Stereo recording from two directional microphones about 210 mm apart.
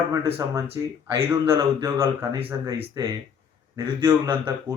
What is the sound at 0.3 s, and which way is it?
Speech, 10° right (ahead or behind).